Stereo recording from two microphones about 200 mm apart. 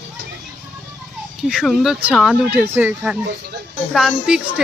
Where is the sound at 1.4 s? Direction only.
Centre (ahead or behind).